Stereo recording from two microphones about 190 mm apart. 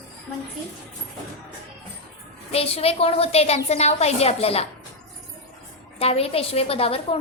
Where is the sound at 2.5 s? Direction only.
30° left (ahead or behind).